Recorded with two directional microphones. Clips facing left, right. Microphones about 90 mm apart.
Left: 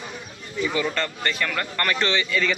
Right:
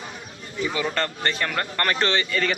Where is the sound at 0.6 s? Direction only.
30° right (ahead or behind).